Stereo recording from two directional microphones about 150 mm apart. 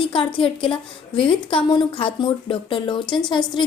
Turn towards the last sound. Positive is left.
turn(degrees=30)  # may be behind; listen again after turning